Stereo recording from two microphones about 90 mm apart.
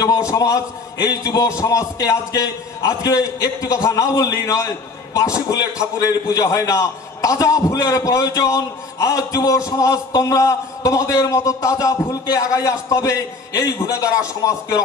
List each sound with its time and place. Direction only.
0.3 s a man's voice: 40° left (ahead or behind)